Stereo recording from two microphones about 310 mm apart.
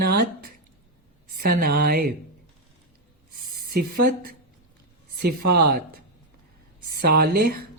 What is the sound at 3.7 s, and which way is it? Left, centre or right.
A woman's voice, right.